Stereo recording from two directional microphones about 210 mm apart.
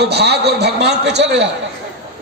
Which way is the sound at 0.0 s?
50° right (ahead or behind).